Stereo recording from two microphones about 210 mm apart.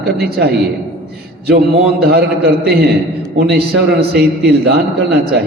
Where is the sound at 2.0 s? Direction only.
50° right (ahead or behind).